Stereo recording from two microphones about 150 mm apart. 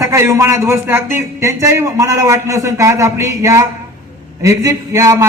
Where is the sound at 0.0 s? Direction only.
20° right (ahead or behind).